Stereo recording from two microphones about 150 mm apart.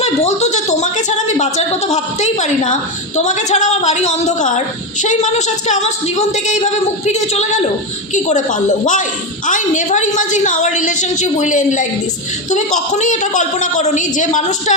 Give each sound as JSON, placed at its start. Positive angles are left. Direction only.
{"t": 0.0, "sound": "a woman's voice", "side_deg": 45}